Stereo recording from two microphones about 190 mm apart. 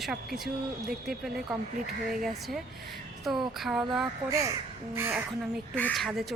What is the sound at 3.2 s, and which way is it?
A woman's voice, 5° right (ahead or behind).